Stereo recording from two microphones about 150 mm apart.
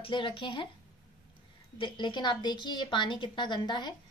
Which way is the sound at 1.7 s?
30° left (ahead or behind).